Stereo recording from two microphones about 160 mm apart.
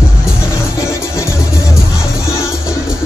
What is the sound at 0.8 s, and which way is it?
Music, 15° left (ahead or behind).